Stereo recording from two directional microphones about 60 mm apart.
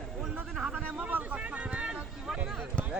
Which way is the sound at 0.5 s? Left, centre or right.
Centre.